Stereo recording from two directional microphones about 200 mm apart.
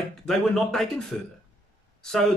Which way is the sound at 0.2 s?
5° left (ahead or behind).